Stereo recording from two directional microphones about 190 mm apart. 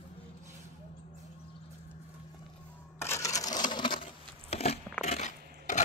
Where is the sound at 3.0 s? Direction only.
15° left (ahead or behind); by 5.8 s 40° left (ahead or behind).